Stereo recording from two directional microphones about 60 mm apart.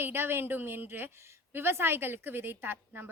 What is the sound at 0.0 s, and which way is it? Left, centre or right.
A woman's voice, right.